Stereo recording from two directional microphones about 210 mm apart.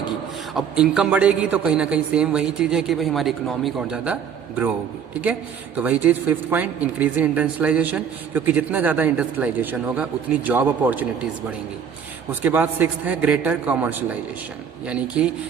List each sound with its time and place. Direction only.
0.5 s a man's voice: 5° right (ahead or behind)
12.3 s a man's voice: 10° right (ahead or behind)